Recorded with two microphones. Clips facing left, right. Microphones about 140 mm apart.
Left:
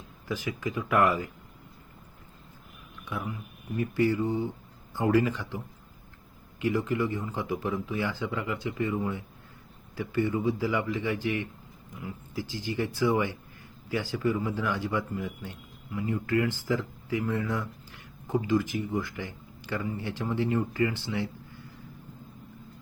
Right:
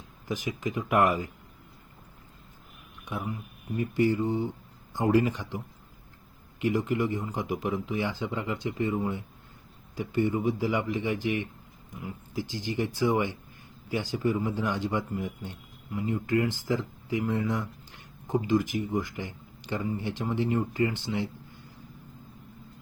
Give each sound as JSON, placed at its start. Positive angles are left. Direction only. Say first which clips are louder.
{"t": 0.3, "sound": "speech", "louder": "right 1 dB", "side_deg": -15}
{"t": 3.8, "sound": "a man's voice", "louder": "even", "side_deg": -15}